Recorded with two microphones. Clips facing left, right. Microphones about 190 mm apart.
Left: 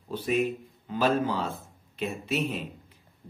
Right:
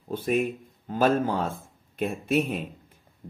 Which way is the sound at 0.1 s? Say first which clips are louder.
Right 1 dB; 50° right (ahead or behind).